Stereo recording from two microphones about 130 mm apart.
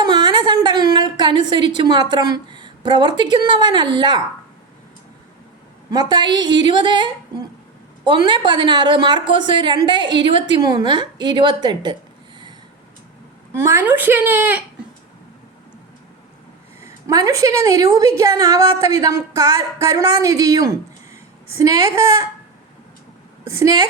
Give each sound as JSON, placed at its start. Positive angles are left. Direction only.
{"t": 0.0, "sound": "a sound", "side_deg": -35}
{"t": 0.9, "sound": "a woman's voice", "side_deg": -35}
{"t": 5.9, "sound": "a woman's voice", "side_deg": -30}
{"t": 8.3, "sound": "a woman's voice", "side_deg": -35}
{"t": 13.5, "sound": "speech", "side_deg": -20}
{"t": 16.8, "sound": "a woman's voice", "side_deg": -25}
{"t": 23.4, "sound": "a woman's voice", "side_deg": -20}